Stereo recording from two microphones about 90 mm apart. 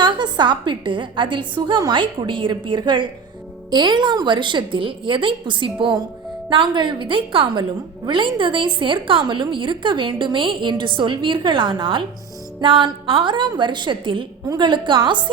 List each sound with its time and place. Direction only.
0.0 s a woman's voice: 55° right (ahead or behind)